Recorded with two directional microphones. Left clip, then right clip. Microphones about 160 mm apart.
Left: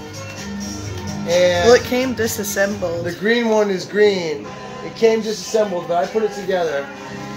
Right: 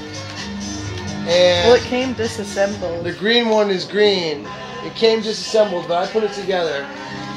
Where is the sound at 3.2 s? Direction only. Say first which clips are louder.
Right 1 dB; 10° right (ahead or behind).